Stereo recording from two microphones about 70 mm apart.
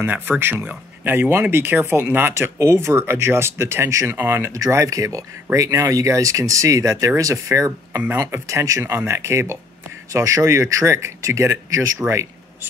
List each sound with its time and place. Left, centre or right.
0.0 s speech: right
4.5 s speech: right